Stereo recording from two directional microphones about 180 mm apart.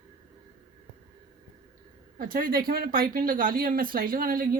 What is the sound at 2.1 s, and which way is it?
Speech, 50° right (ahead or behind).